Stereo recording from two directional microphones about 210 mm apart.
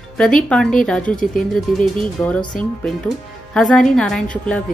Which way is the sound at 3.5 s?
Centre (ahead or behind).